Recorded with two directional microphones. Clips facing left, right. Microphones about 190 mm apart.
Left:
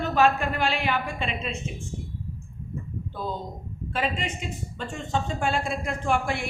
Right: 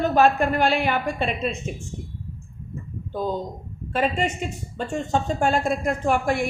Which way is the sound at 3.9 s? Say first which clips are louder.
Right 6 dB; 40° right (ahead or behind).